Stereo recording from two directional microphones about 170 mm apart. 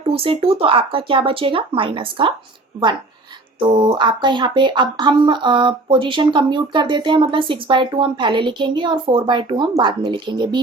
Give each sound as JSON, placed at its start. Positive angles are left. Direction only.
{"t": 0.0, "sound": "speech", "side_deg": -35}
{"t": 3.7, "sound": "speech", "side_deg": -25}